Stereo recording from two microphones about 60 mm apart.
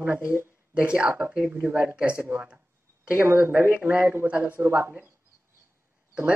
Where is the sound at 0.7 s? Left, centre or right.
Centre; by 4.9 s right.